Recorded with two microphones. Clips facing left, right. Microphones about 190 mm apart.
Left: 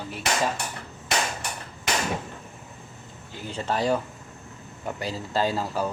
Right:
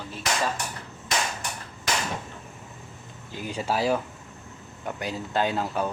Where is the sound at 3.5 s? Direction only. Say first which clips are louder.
Even; 10° right (ahead or behind).